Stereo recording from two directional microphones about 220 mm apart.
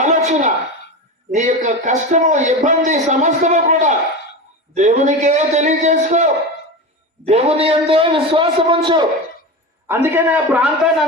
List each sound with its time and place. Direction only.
0.0 s a sound: 35° right (ahead or behind)
1.3 s a man's voice: 35° right (ahead or behind)
9.8 s a man's voice: 10° right (ahead or behind)